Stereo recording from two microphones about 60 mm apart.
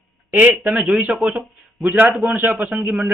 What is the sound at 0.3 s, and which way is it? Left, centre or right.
Speech, right.